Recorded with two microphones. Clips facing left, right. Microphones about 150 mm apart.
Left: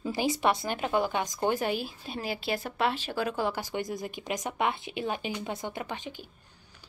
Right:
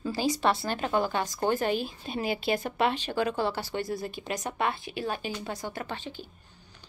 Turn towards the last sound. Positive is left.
turn(degrees=15)  # may be behind; listen again after turning